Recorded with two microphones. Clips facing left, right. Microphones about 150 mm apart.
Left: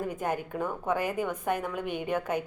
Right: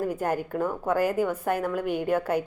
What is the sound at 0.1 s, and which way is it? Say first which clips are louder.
A woman's voice: right 4 dB; 10° right (ahead or behind).